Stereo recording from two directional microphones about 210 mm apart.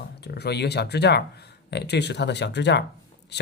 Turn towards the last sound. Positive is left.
turn(degrees=55)  # may be behind; listen again after turning